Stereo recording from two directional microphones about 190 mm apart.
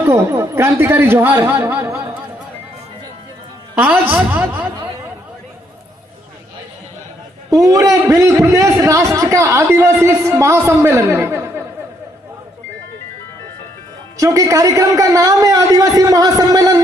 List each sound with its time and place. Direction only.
0.0 s a man's voice: 15° right (ahead or behind)
3.8 s a man's voice: 10° right (ahead or behind)
7.5 s a man's voice: 15° right (ahead or behind)
14.2 s a man's voice: 15° right (ahead or behind)